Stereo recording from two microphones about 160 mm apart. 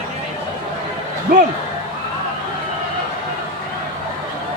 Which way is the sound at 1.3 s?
60° right (ahead or behind).